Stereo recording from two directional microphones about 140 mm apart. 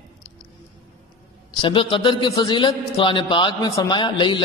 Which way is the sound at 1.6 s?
35° left (ahead or behind).